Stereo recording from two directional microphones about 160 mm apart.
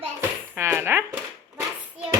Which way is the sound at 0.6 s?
15° right (ahead or behind).